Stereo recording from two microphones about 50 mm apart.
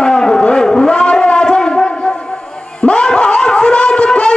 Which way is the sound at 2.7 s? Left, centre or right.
Left.